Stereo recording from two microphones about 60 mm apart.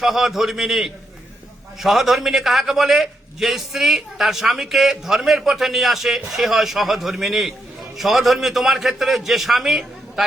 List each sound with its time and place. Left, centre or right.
0.0 s a man's voice: centre